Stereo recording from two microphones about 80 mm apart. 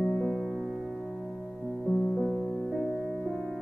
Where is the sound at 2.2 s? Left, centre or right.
Centre.